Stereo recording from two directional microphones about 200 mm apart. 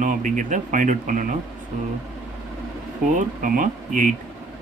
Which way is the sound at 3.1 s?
40° right (ahead or behind).